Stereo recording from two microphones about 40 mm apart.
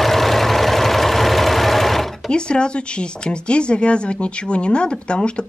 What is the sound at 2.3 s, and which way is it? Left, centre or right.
Speech, left.